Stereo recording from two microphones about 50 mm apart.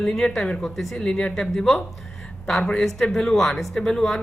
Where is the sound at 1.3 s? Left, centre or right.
Centre.